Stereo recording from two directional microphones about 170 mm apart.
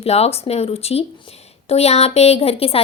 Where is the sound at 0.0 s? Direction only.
35° left (ahead or behind).